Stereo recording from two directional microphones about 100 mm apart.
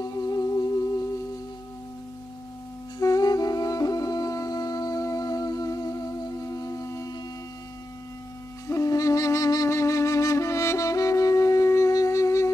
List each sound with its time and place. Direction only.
0.0 s music: 40° left (ahead or behind)
3.0 s music: 40° left (ahead or behind)
8.6 s music: 35° left (ahead or behind)